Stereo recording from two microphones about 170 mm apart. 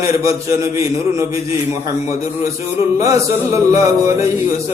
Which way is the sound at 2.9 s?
20° right (ahead or behind).